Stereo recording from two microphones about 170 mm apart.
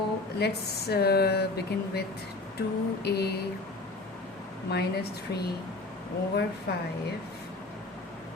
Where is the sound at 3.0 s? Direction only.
70° left (ahead or behind).